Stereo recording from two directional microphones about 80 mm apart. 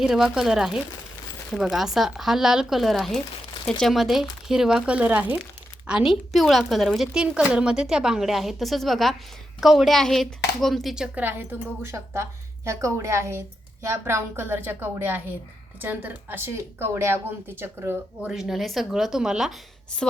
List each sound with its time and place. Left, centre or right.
0.0 s a woman's voice: centre; by 5.4 s right
5.9 s a woman's voice: centre
11.1 s a woman's voice: right
18.3 s a woman's voice: centre